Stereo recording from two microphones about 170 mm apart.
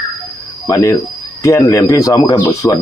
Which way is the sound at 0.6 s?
20° left (ahead or behind).